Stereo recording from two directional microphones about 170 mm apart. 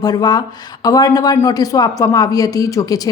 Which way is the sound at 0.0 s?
25° left (ahead or behind).